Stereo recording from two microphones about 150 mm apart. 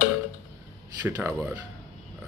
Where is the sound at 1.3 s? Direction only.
5° right (ahead or behind).